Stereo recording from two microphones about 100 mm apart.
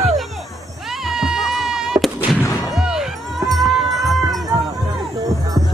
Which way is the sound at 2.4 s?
30° left (ahead or behind).